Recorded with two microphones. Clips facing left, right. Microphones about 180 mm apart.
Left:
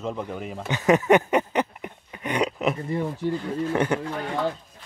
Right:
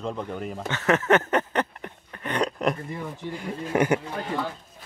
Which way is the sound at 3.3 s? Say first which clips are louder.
Even; 10° right (ahead or behind).